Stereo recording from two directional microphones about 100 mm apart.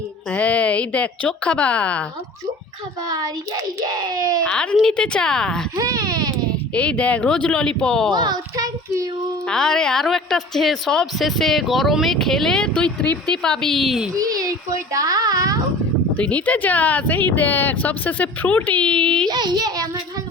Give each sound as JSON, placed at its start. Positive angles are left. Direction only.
{"t": 0.3, "sound": "speech", "side_deg": 15}
{"t": 3.1, "sound": "a child's voice", "side_deg": -40}
{"t": 4.4, "sound": "speech", "side_deg": 10}
{"t": 5.7, "sound": "speech", "side_deg": -35}
{"t": 6.7, "sound": "speech", "side_deg": 10}
{"t": 8.1, "sound": "a sound", "side_deg": -45}
{"t": 9.5, "sound": "a woman's voice", "side_deg": 5}
{"t": 14.1, "sound": "a child's voice", "side_deg": -40}
{"t": 16.1, "sound": "speech", "side_deg": 15}
{"t": 19.3, "sound": "a child's voice", "side_deg": -45}